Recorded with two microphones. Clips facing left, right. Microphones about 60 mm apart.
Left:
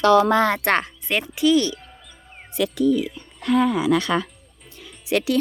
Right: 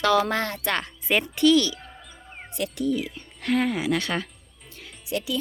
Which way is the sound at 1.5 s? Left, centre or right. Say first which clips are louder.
Left 2 dB; left.